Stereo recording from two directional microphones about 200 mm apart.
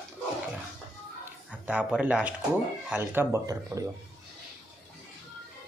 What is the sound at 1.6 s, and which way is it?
Speech, 5° right (ahead or behind).